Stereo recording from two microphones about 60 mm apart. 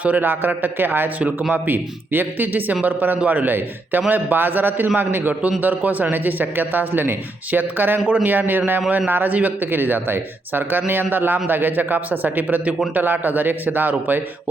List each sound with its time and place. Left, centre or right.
0.0 s a man's voice: right